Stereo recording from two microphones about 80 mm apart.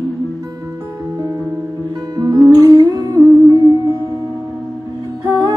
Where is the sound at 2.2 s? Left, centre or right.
Right.